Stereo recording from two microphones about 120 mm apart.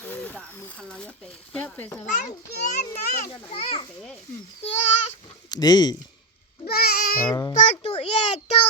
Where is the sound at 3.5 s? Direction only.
55° left (ahead or behind).